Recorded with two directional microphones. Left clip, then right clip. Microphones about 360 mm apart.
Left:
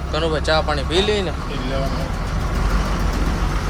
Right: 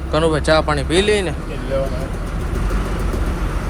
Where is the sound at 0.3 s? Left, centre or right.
Centre.